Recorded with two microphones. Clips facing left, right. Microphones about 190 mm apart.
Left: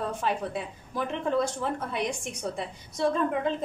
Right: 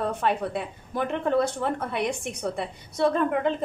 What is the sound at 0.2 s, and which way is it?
A woman's voice, 60° right (ahead or behind).